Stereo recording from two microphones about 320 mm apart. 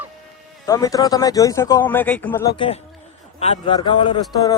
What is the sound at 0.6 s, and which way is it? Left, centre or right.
A man's voice, centre.